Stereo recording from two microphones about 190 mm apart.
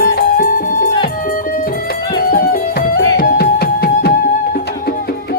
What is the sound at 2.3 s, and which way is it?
Music, 50° left (ahead or behind).